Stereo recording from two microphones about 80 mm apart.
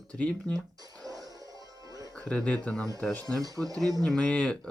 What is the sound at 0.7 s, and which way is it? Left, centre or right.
Music, right.